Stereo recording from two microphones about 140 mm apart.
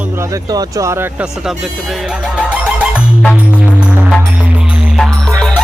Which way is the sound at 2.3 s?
10° right (ahead or behind).